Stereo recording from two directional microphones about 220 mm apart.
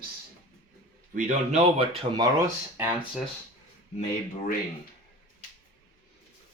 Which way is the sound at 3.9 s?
30° left (ahead or behind).